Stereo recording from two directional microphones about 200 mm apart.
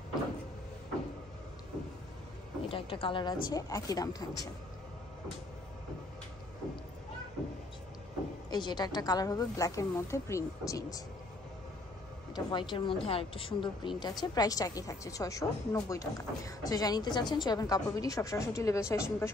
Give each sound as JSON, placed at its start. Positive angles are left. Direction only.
{"t": 2.7, "sound": "a woman's voice", "side_deg": 25}
{"t": 8.5, "sound": "a woman's voice", "side_deg": 20}
{"t": 12.4, "sound": "a woman's voice", "side_deg": 20}